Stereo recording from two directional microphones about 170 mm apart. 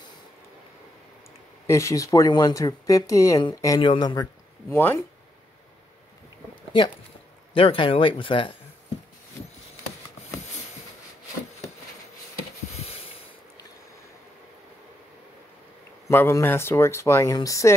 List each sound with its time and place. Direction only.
1.7 s speech: 20° left (ahead or behind)
4.7 s speech: 15° left (ahead or behind)
7.5 s speech: 30° left (ahead or behind)
12.8 s a sound: 35° left (ahead or behind)
16.1 s speech: 15° left (ahead or behind)